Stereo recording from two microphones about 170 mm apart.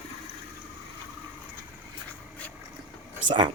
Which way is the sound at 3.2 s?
25° right (ahead or behind).